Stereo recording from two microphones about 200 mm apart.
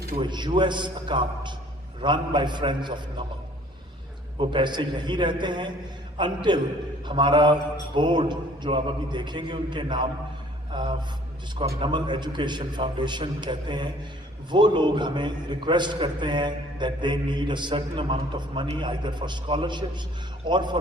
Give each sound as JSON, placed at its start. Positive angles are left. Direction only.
{"t": 0.2, "sound": "a man's voice", "side_deg": -25}
{"t": 4.4, "sound": "a man's voice", "side_deg": -25}